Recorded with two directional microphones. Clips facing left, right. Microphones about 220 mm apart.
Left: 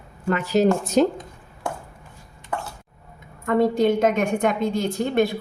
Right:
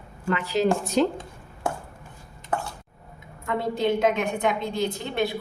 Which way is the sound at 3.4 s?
45° left (ahead or behind).